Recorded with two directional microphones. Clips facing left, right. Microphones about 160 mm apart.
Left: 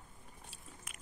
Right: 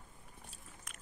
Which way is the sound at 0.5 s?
10° left (ahead or behind).